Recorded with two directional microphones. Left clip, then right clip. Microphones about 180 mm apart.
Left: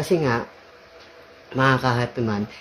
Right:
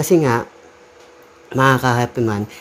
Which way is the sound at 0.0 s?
50° right (ahead or behind).